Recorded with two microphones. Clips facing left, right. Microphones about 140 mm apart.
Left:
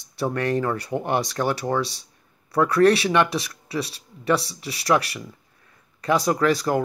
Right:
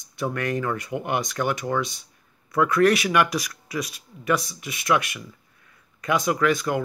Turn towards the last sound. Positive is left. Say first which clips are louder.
# left 2 dB
turn(degrees=35)  # may be behind; listen again after turning